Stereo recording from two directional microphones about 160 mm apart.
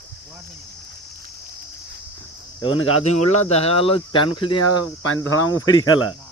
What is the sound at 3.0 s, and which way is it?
Speech, 45° left (ahead or behind).